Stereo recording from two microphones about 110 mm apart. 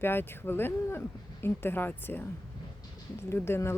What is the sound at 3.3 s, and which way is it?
Speech, 20° left (ahead or behind).